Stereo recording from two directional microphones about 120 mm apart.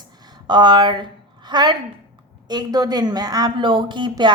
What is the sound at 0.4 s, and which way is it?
A woman's voice, 40° right (ahead or behind).